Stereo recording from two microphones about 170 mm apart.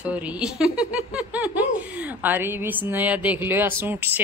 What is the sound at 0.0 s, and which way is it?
Speech, 10° right (ahead or behind).